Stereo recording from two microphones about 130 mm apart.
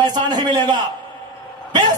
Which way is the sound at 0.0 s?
35° right (ahead or behind).